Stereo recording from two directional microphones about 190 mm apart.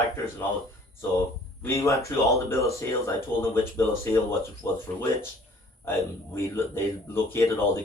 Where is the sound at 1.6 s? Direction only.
15° left (ahead or behind).